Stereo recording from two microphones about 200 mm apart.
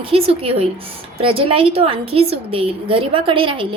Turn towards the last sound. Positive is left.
turn(degrees=-25)  # may be behind; listen again after turning